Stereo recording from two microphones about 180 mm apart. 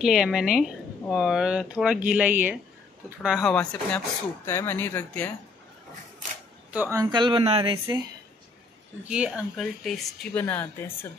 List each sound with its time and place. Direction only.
0.0 s speech: centre (ahead or behind)
6.7 s speech: 15° right (ahead or behind); by 7.8 s 30° right (ahead or behind)
9.0 s speech: 5° right (ahead or behind); by 11.1 s 10° left (ahead or behind)